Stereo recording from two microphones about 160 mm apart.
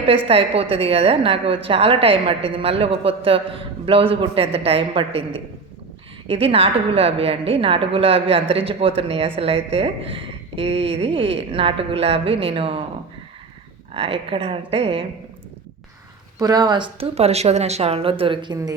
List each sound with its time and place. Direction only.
0.3 s a woman's voice: 35° right (ahead or behind)
13.9 s a woman's voice: 35° right (ahead or behind)
16.4 s a woman's voice: 25° right (ahead or behind)